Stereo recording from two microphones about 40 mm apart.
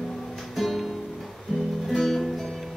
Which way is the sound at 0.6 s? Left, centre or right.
Centre.